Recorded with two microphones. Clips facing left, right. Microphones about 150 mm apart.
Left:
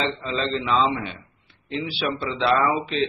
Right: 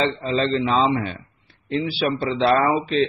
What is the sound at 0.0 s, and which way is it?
A man's voice, 40° right (ahead or behind).